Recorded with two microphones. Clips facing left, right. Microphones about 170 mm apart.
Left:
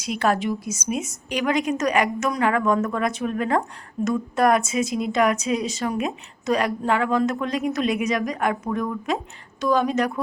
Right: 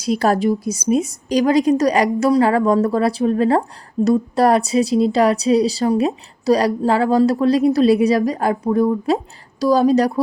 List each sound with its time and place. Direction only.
0.0 s speech: 35° right (ahead or behind)